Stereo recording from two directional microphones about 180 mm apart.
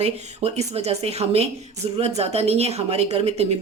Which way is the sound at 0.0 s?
35° right (ahead or behind).